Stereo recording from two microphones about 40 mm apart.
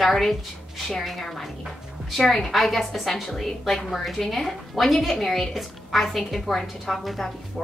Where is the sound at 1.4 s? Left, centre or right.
Centre.